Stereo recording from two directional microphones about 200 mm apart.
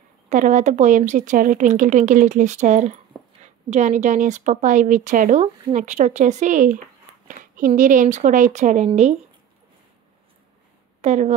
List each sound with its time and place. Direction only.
0.3 s a woman's voice: 40° right (ahead or behind)
11.0 s speech: 35° right (ahead or behind)